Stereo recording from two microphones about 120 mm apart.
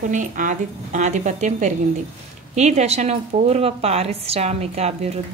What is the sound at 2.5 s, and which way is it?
A woman's voice, 70° right (ahead or behind).